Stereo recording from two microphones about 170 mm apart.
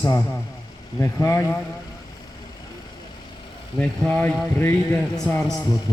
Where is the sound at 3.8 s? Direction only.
5° left (ahead or behind).